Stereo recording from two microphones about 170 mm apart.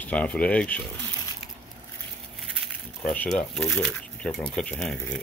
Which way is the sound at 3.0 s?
5° left (ahead or behind).